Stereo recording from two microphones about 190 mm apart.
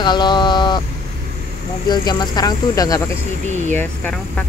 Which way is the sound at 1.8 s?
20° left (ahead or behind).